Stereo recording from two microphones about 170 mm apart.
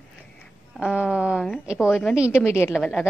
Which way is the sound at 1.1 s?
5° right (ahead or behind).